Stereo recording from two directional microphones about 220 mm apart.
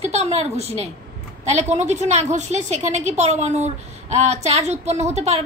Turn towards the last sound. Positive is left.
turn(degrees=-30)  # may be behind; listen again after turning